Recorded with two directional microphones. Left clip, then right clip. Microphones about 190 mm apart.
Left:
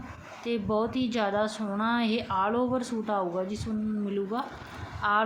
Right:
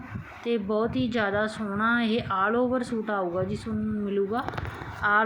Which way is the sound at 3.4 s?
30° left (ahead or behind).